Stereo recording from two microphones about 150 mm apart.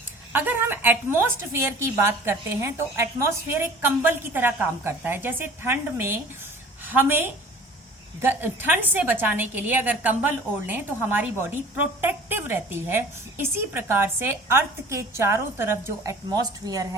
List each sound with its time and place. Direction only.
0.3 s a woman's voice: 15° right (ahead or behind)